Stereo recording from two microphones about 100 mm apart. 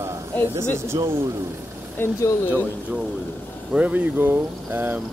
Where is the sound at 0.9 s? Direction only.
40° right (ahead or behind).